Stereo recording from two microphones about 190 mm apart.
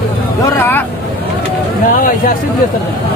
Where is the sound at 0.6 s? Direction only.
10° left (ahead or behind).